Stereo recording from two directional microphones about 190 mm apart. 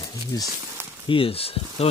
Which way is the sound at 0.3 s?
15° left (ahead or behind).